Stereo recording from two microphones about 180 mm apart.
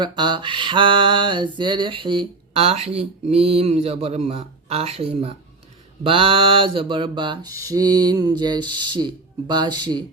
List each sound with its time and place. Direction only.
0.0 s mantra: 25° right (ahead or behind)
6.0 s speech: 30° right (ahead or behind)